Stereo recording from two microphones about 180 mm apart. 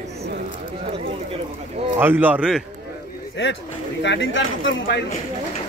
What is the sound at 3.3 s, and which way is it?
A man's voice, 90° left.